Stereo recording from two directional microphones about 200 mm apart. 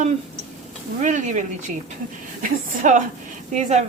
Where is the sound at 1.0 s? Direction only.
35° right (ahead or behind).